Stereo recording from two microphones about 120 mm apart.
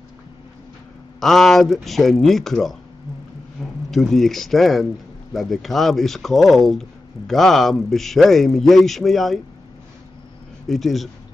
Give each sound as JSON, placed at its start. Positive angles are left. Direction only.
{"t": 1.2, "sound": "speech", "side_deg": 5}
{"t": 3.6, "sound": "a sound", "side_deg": 0}
{"t": 3.9, "sound": "speech", "side_deg": 0}
{"t": 10.7, "sound": "speech", "side_deg": 0}